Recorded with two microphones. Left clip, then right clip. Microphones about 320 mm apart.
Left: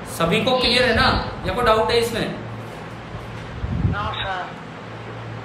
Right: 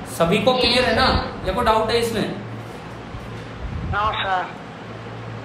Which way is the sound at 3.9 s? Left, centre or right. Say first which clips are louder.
Right 5 dB; centre.